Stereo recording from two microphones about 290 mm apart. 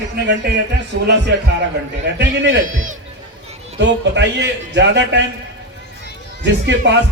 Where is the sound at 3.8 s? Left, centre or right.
Right.